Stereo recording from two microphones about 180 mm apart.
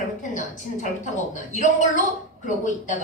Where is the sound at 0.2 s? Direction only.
45° left (ahead or behind).